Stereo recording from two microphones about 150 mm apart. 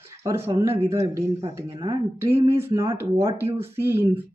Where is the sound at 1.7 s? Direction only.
35° right (ahead or behind).